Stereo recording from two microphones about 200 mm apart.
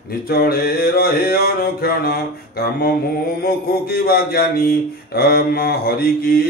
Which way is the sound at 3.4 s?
50° left (ahead or behind).